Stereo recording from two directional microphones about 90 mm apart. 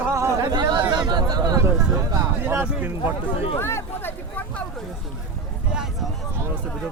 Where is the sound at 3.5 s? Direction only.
25° left (ahead or behind).